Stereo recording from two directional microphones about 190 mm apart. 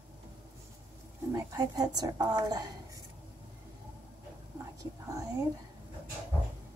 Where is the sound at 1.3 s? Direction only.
15° right (ahead or behind).